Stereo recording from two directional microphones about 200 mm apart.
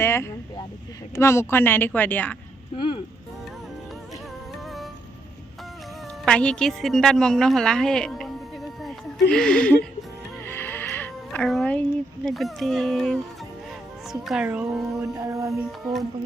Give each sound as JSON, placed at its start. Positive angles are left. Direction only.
{"t": 0.0, "sound": "vehicle", "side_deg": 10}
{"t": 1.1, "sound": "speech", "side_deg": 15}
{"t": 6.2, "sound": "a woman's voice", "side_deg": 5}
{"t": 15.1, "sound": "music", "side_deg": -15}
{"t": 15.6, "sound": "speech", "side_deg": 0}